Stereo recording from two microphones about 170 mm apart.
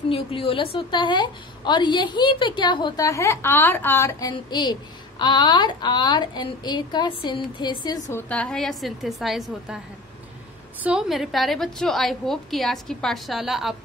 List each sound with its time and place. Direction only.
0.1 s a woman's voice: 30° left (ahead or behind)
8.1 s a woman's voice: 10° left (ahead or behind)
10.8 s a woman's voice: 5° right (ahead or behind)